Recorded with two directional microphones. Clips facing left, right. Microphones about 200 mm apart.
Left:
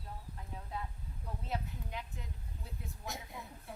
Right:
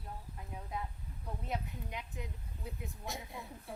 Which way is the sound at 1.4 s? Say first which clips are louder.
Even; 15° right (ahead or behind).